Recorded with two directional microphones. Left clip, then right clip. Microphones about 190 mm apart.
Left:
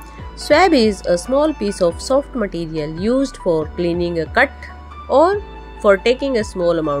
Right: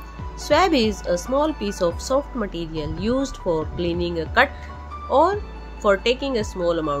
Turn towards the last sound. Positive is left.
turn(degrees=25)  # may be behind; listen again after turning